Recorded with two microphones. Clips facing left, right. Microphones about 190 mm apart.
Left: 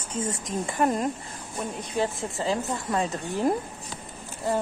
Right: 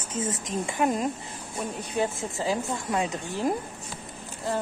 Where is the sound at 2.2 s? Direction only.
Centre (ahead or behind).